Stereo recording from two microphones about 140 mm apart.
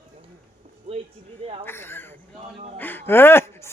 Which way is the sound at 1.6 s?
15° left (ahead or behind).